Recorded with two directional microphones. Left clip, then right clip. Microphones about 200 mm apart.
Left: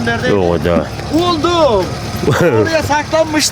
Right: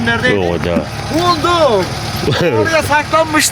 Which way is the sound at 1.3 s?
5° left (ahead or behind).